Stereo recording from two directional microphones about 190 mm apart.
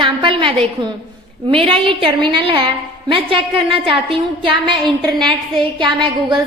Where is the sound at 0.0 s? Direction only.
25° right (ahead or behind).